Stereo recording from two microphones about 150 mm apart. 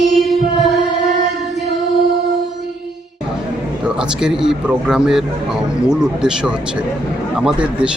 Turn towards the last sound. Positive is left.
turn(degrees=-5)  # may be behind; listen again after turning